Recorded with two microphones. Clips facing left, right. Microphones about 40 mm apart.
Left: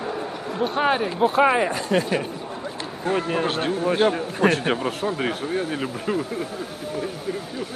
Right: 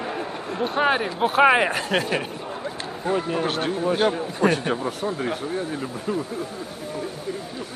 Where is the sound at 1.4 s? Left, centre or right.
Right.